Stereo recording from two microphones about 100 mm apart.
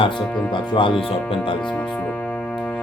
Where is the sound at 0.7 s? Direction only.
55° left (ahead or behind).